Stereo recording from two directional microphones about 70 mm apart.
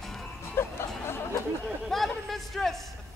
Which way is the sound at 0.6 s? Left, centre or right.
Left.